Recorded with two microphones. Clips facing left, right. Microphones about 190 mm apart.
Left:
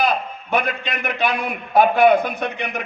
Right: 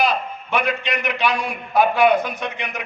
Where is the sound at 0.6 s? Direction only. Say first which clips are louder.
Right 2 dB; 55° left (ahead or behind).